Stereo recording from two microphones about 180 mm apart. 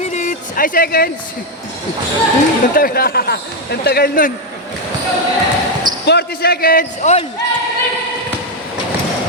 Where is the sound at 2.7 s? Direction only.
55° left (ahead or behind).